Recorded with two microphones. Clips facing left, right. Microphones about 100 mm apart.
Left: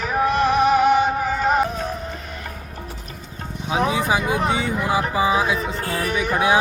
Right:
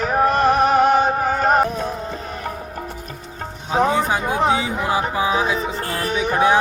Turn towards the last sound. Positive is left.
turn(degrees=-15)  # may be behind; listen again after turning